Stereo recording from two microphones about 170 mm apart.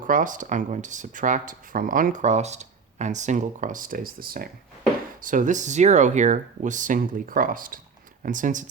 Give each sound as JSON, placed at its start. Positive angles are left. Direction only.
{"t": 0.1, "sound": "speech", "side_deg": -50}
{"t": 5.2, "sound": "speech", "side_deg": -50}